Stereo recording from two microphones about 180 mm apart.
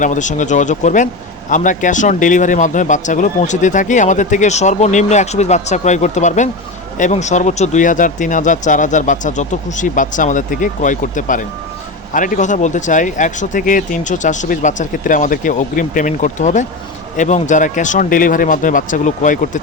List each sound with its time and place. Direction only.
0.0 s a man's voice: 45° left (ahead or behind)